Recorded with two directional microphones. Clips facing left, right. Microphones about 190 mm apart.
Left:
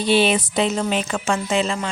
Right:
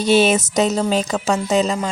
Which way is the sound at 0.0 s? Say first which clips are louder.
Right 3 dB; 45° right (ahead or behind).